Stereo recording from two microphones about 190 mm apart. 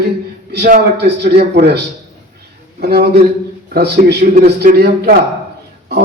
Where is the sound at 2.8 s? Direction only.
55° right (ahead or behind).